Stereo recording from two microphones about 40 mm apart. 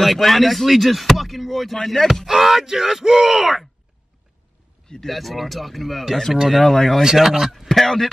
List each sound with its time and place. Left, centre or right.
0.0 s speech: centre
2.2 s speech: centre
5.0 s speech: centre
7.0 s speech: centre
7.5 s speech: centre